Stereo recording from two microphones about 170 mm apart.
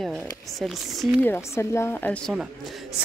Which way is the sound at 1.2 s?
15° left (ahead or behind).